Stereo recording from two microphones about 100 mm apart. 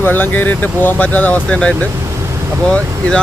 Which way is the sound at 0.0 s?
20° left (ahead or behind).